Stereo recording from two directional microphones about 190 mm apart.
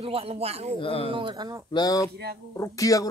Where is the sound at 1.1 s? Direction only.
25° right (ahead or behind).